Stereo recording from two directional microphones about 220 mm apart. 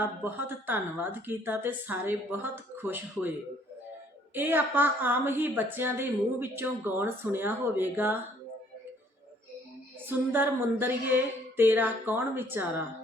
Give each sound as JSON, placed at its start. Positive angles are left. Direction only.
{"t": 0.0, "sound": "speech", "side_deg": -10}
{"t": 4.4, "sound": "speech", "side_deg": -10}
{"t": 10.1, "sound": "speech", "side_deg": -10}